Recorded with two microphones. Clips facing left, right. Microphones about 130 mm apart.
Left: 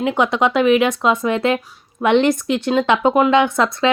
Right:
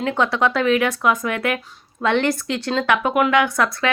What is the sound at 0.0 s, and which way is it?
Speech, 15° left (ahead or behind).